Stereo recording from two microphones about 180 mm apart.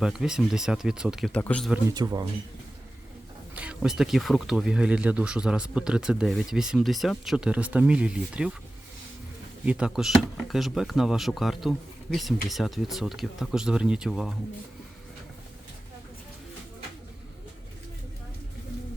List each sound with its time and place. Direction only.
0.0 s speech: 5° right (ahead or behind)
1.9 s speech: 20° right (ahead or behind)
3.5 s speech: 5° right (ahead or behind)
9.6 s speech: 5° right (ahead or behind)